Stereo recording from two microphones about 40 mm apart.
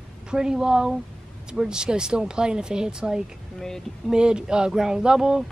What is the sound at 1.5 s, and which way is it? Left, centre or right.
Speech, centre.